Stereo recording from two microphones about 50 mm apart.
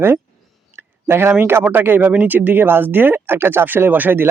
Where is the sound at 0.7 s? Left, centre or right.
Right.